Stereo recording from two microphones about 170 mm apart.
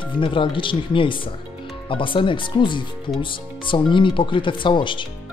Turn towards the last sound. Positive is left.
turn(degrees=30)  # may be behind; listen again after turning